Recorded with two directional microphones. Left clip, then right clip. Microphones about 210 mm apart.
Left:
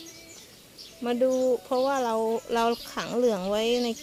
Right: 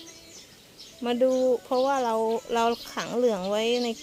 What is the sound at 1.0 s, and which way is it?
Speech, 15° right (ahead or behind).